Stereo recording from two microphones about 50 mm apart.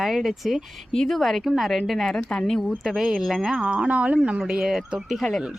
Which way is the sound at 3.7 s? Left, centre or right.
Right.